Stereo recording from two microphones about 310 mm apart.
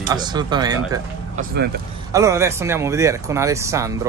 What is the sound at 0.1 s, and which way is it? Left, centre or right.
Speech, centre.